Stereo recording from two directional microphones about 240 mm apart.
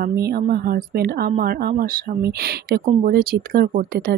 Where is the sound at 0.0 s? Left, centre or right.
Right.